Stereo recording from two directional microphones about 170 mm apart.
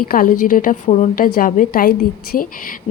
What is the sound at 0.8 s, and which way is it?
A woman's voice, 40° left (ahead or behind).